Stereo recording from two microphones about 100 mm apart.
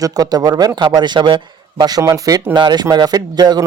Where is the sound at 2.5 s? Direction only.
45° right (ahead or behind).